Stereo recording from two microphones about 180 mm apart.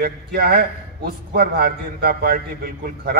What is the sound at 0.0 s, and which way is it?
A man's voice, 55° right (ahead or behind).